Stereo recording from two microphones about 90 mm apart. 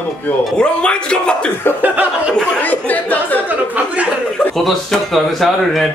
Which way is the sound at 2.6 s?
15° left (ahead or behind).